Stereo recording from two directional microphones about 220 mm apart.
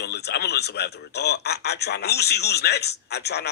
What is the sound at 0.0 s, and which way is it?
A man's voice, 50° left (ahead or behind).